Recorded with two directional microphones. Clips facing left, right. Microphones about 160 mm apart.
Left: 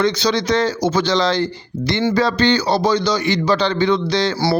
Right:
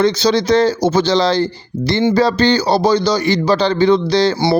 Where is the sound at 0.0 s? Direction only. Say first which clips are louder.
Right 4 dB; 35° right (ahead or behind).